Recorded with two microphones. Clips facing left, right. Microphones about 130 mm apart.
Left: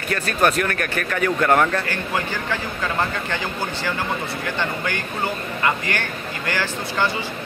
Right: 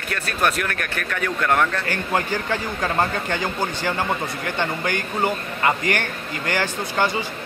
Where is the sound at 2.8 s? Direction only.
40° right (ahead or behind).